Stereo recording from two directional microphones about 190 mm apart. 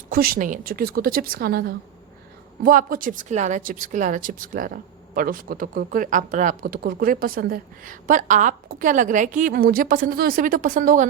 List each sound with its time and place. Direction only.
0.1 s a woman's voice: 50° right (ahead or behind)